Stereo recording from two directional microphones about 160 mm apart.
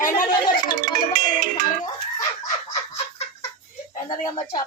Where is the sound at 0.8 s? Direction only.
60° right (ahead or behind).